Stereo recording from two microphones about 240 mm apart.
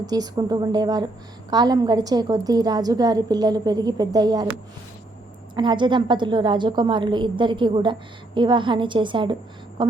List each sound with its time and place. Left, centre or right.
0.0 s a woman's voice: centre
5.5 s a woman's voice: centre